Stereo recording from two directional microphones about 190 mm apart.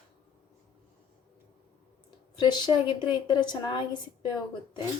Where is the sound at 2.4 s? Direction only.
20° left (ahead or behind).